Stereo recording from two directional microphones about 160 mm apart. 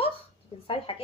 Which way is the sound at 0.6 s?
35° left (ahead or behind).